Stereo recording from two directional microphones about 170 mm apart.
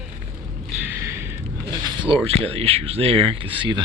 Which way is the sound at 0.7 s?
10° right (ahead or behind).